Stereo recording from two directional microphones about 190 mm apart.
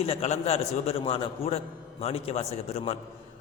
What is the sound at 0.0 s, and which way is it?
A man's voice, 30° left (ahead or behind).